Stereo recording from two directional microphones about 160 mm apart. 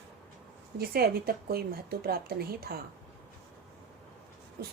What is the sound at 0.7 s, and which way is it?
Speech, 75° right (ahead or behind).